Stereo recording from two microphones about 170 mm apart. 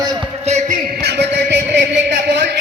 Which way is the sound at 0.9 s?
75° right (ahead or behind).